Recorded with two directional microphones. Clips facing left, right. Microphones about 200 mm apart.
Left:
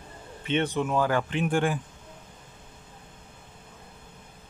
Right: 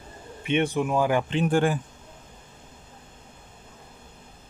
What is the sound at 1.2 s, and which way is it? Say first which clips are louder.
Speech: right 3 dB; 35° right (ahead or behind).